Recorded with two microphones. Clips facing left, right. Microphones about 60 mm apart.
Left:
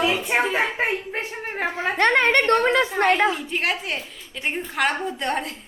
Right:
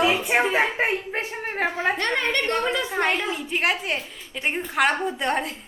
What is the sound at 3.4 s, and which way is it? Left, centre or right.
A woman's voice, centre.